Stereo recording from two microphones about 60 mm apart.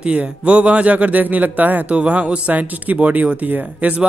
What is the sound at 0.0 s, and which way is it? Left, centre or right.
Speech, centre.